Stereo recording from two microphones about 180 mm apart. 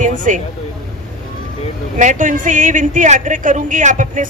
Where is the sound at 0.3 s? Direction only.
45° right (ahead or behind).